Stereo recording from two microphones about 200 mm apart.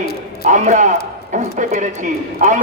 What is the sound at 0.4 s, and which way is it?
A man's voice, 35° right (ahead or behind).